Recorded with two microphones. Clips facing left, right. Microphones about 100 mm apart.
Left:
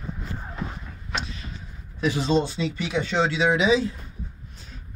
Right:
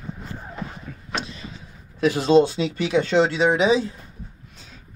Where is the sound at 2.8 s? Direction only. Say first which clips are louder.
Right 8 dB; 85° right.